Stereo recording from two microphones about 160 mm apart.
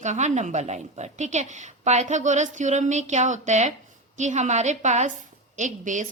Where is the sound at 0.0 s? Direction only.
45° right (ahead or behind).